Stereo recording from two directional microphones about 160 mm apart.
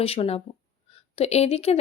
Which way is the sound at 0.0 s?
35° left (ahead or behind).